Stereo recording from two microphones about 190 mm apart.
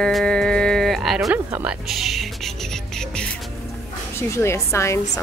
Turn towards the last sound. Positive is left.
turn(degrees=15)  # may be behind; listen again after turning